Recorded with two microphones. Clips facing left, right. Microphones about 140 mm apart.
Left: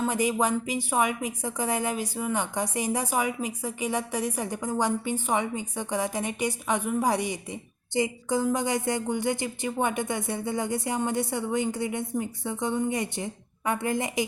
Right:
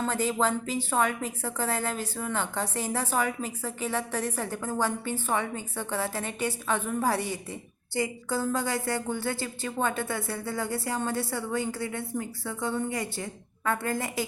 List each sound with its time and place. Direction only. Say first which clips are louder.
0.0 s a woman's voice: left 2 dB; 15° left (ahead or behind)